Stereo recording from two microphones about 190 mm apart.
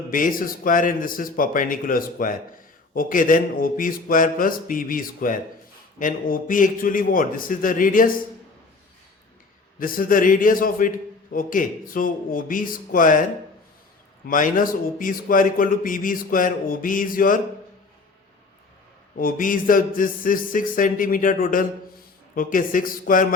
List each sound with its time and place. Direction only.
0.1 s a man's voice: 45° left (ahead or behind)
9.7 s a man's voice: 50° left (ahead or behind)
14.3 s a man's voice: 45° left (ahead or behind)
19.1 s a man's voice: 45° left (ahead or behind)